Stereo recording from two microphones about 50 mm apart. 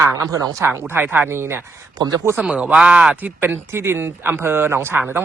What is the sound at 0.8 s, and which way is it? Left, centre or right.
Speech, right.